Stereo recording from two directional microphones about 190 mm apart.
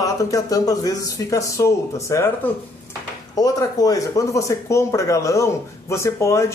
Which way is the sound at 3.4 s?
20° left (ahead or behind).